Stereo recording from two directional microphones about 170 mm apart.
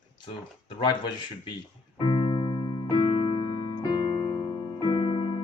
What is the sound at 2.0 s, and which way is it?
Music, 30° left (ahead or behind).